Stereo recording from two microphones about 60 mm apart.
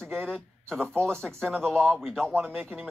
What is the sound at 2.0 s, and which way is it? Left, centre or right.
Speech, centre.